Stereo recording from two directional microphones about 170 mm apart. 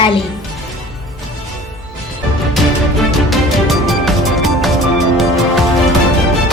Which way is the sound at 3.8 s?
Centre (ahead or behind).